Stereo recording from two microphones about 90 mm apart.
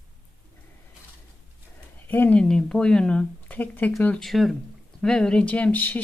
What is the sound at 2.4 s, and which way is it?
Speech, 10° left (ahead or behind).